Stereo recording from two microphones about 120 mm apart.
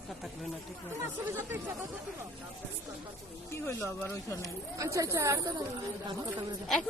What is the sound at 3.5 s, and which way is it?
Speech, 20° left (ahead or behind).